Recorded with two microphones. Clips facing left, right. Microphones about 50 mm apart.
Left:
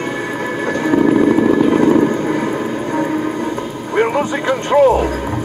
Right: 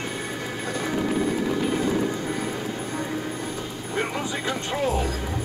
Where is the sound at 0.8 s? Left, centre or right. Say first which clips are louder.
Left 13 dB; left.